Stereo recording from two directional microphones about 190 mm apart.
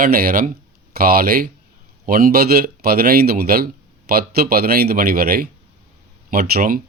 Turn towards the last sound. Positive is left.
turn(degrees=-50)  # may be behind; listen again after turning